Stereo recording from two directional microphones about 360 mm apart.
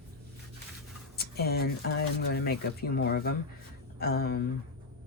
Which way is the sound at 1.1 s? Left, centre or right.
Left.